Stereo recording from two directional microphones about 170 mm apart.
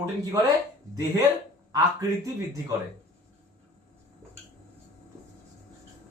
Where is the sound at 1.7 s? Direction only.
20° right (ahead or behind).